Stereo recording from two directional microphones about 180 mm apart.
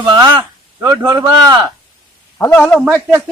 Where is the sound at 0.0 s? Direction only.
25° right (ahead or behind).